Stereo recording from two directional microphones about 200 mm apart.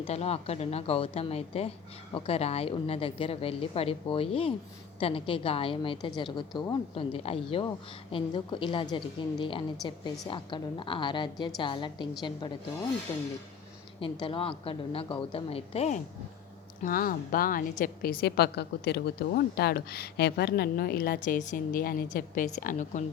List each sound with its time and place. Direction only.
0.0 s a woman's voice: 30° left (ahead or behind)
14.0 s a woman's voice: 25° left (ahead or behind)
16.8 s a woman's voice: 45° left (ahead or behind)